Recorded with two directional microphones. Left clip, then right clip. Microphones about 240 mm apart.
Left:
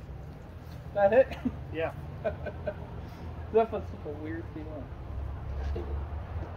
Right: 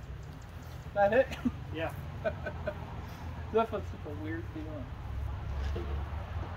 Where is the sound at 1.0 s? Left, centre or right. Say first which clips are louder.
Left 3 dB; centre.